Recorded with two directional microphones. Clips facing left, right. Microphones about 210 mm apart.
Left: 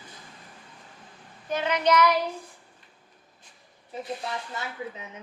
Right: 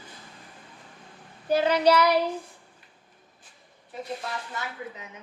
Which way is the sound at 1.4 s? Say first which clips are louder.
Right 4 dB; 35° right (ahead or behind).